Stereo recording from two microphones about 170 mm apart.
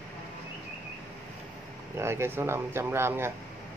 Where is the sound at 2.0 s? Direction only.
15° right (ahead or behind).